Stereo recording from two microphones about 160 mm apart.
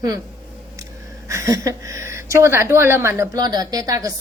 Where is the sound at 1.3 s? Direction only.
20° right (ahead or behind).